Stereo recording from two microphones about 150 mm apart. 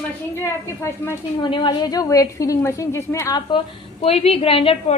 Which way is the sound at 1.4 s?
30° left (ahead or behind).